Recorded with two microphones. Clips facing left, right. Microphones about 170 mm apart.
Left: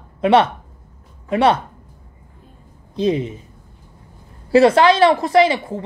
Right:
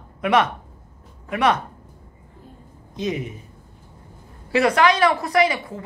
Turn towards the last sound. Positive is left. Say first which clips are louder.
# left 5 dB
turn(degrees=30)  # may be behind; listen again after turning